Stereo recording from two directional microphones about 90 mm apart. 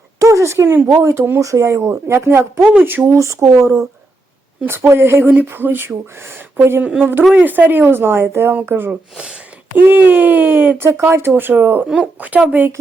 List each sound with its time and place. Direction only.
0.2 s speech: 35° right (ahead or behind)
3.2 s a woman's voice: 35° right (ahead or behind); by 12.7 s 15° right (ahead or behind)